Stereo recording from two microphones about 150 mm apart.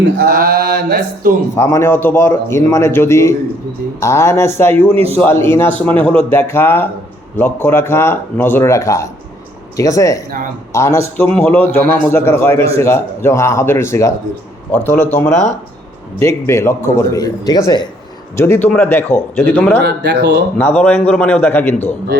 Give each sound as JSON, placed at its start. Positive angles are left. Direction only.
{"t": 0.2, "sound": "mantra", "side_deg": -75}
{"t": 1.5, "sound": "a man's voice", "side_deg": 20}
{"t": 18.3, "sound": "a man's voice", "side_deg": 15}
{"t": 19.8, "sound": "mantra", "side_deg": -90}
{"t": 20.6, "sound": "a man's voice", "side_deg": 10}